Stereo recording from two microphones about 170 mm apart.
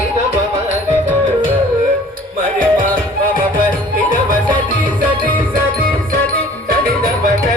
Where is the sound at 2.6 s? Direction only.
55° right (ahead or behind).